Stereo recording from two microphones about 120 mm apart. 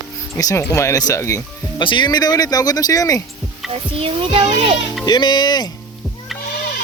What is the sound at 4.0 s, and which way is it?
Speech, 50° right (ahead or behind).